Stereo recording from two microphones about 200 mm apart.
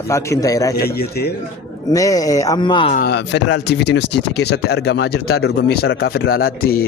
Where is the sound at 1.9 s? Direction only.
15° left (ahead or behind).